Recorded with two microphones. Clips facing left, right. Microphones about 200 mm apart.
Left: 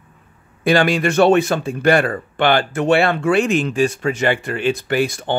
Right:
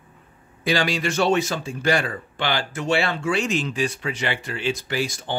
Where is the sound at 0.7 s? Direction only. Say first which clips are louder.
Left 7 dB; 55° left (ahead or behind).